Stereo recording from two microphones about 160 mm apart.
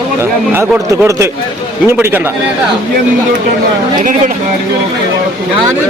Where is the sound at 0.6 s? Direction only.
15° right (ahead or behind).